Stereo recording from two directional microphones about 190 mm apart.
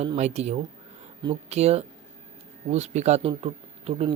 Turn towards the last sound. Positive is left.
turn(degrees=-30)  # may be behind; listen again after turning